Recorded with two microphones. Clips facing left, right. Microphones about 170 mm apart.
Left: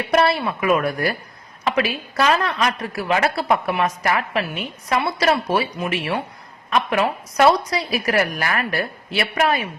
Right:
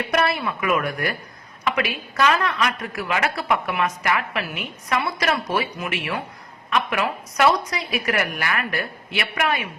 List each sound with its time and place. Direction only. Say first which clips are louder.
0.1 s a woman's voice: left 6 dB; 30° left (ahead or behind)